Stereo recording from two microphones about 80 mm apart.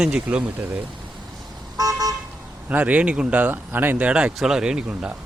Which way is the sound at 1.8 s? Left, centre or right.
Right.